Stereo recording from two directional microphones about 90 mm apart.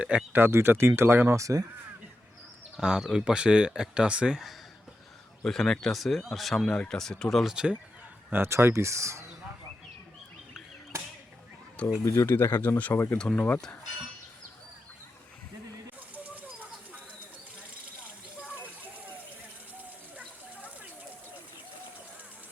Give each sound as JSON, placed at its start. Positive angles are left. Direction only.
{"t": 0.3, "sound": "speech", "side_deg": -25}
{"t": 1.4, "sound": "speech", "side_deg": -40}
{"t": 2.7, "sound": "speech", "side_deg": -10}
{"t": 5.4, "sound": "speech", "side_deg": 5}
{"t": 7.5, "sound": "speech", "side_deg": -10}
{"t": 8.3, "sound": "speech", "side_deg": -30}
{"t": 12.0, "sound": "speech", "side_deg": 30}
{"t": 13.1, "sound": "speech", "side_deg": 10}
{"t": 16.1, "sound": "a sound", "side_deg": -20}
{"t": 18.0, "sound": "a sound", "side_deg": -15}